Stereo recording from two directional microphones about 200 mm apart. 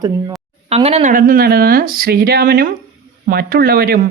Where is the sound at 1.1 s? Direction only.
45° right (ahead or behind).